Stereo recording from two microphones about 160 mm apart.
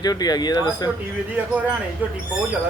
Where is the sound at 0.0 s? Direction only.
25° left (ahead or behind).